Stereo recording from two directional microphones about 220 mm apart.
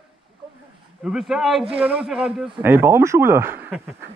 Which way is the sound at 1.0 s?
5° right (ahead or behind).